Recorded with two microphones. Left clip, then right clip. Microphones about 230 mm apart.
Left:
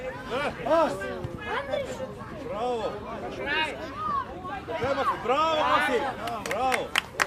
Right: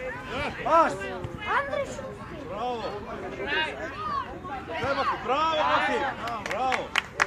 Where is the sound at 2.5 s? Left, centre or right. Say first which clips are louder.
Left 2 dB; left.